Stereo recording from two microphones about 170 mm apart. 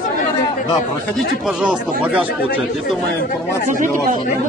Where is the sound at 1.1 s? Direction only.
5° right (ahead or behind).